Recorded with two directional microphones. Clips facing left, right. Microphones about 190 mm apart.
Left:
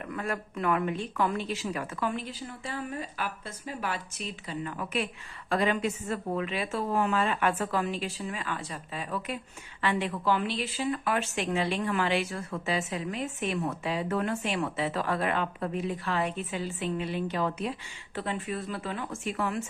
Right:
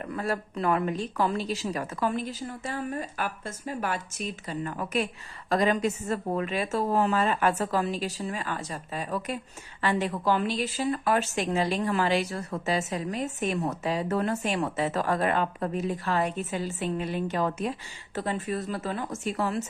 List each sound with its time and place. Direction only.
0.0 s speech: 35° right (ahead or behind)